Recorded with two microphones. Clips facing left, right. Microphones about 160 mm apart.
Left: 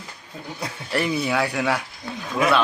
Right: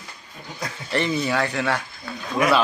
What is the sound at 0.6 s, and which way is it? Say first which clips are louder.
Speech: even; 5° left (ahead or behind).